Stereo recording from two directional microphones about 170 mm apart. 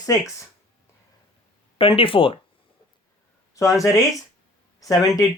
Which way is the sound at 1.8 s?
30° left (ahead or behind).